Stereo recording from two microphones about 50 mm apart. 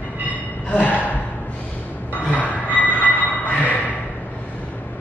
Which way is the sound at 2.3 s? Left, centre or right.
Left.